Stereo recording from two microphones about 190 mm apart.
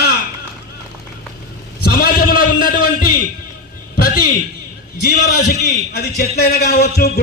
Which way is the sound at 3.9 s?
50° left (ahead or behind).